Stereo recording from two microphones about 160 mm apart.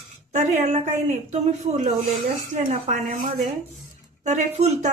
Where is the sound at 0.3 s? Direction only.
50° right (ahead or behind).